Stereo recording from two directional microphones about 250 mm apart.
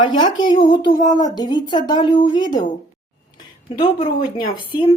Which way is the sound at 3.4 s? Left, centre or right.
Centre.